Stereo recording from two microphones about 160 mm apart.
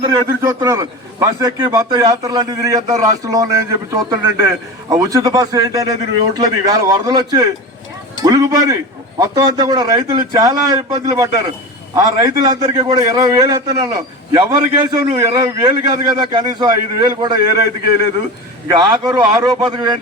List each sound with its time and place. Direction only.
0.4 s a man's voice: 20° right (ahead or behind)
18.7 s a man's voice: 25° right (ahead or behind)